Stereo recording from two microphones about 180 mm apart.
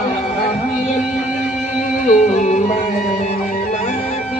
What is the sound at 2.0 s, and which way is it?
Music, 40° left (ahead or behind).